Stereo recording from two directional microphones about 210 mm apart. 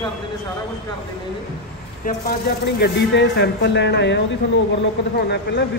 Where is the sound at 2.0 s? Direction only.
45° left (ahead or behind).